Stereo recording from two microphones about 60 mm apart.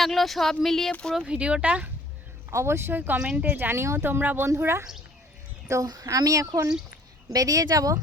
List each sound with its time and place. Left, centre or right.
0.0 s speech: centre
1.3 s speech: centre
2.5 s speech: right
3.2 s speech: centre
3.4 s speech: right
4.4 s speech: right
5.8 s speech: right
7.3 s speech: right